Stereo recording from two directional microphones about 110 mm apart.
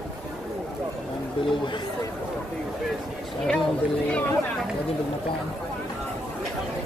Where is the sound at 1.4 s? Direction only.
55° left (ahead or behind).